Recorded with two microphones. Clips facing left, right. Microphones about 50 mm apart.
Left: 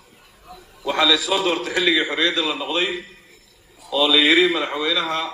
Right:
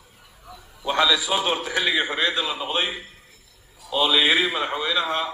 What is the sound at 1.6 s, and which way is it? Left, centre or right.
Speech, right.